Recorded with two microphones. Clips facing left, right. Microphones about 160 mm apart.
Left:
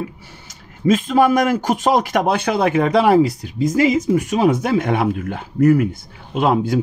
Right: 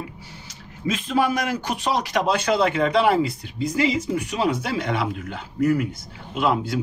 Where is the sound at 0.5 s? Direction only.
50° left (ahead or behind).